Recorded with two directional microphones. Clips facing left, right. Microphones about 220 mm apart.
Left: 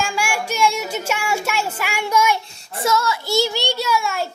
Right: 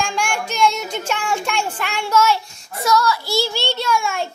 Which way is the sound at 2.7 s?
25° left (ahead or behind).